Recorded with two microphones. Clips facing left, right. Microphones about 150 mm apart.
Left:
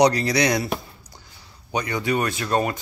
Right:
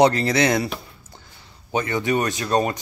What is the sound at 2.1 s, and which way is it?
Speech, 20° right (ahead or behind).